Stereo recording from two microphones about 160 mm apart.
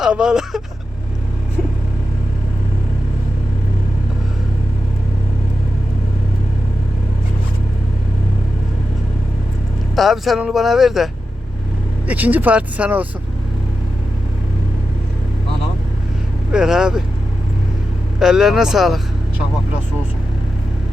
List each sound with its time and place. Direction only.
0.0 s speech: 5° right (ahead or behind)
9.9 s speech: centre (ahead or behind)
16.5 s speech: 5° right (ahead or behind)
18.2 s speech: 5° right (ahead or behind)